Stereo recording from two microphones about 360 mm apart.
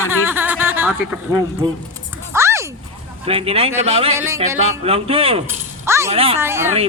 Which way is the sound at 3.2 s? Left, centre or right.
Centre.